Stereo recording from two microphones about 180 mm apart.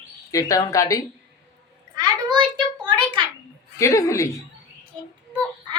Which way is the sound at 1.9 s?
25° right (ahead or behind).